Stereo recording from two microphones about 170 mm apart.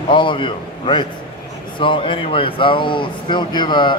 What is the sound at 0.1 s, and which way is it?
Speech, 30° left (ahead or behind).